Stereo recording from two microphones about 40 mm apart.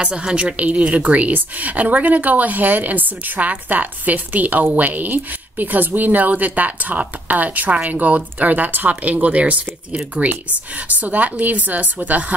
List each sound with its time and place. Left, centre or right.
0.0 s a woman's voice: right
10.9 s speech: right